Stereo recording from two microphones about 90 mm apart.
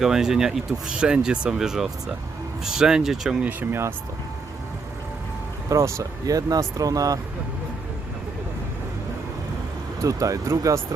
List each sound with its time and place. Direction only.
0.0 s speech: 5° right (ahead or behind)
3.4 s speech: 15° right (ahead or behind)
5.6 s speech: 40° right (ahead or behind)
10.0 s speech: 40° right (ahead or behind)